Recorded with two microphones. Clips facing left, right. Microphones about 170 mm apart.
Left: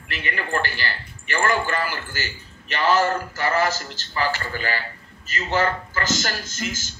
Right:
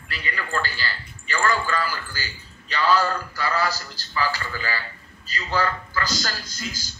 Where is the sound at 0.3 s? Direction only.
20° left (ahead or behind).